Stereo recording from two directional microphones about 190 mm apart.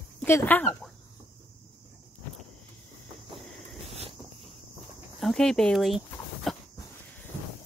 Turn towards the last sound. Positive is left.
turn(degrees=0)  # may be behind; listen again after turning